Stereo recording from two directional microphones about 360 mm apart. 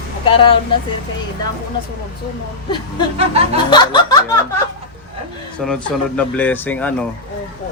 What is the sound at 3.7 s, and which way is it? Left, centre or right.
Speech, centre.